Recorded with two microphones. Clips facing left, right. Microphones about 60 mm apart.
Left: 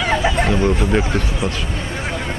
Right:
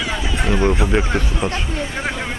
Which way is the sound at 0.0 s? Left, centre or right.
Left.